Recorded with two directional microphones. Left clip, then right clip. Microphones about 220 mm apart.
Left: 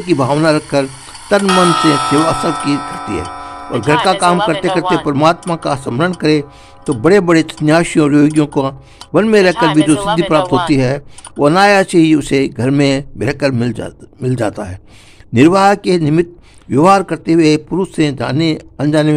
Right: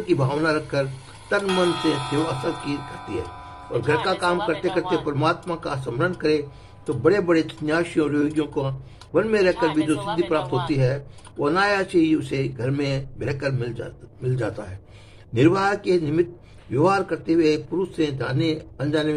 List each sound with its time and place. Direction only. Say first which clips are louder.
0.0 s speech: left 9 dB; 45° left (ahead or behind)